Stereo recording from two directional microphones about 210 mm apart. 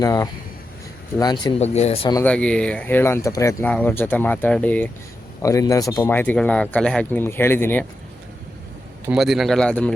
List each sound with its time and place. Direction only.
0.0 s speech: 15° left (ahead or behind)
1.5 s speech: 30° left (ahead or behind)
2.1 s speech: 5° left (ahead or behind)
9.0 s speech: centre (ahead or behind)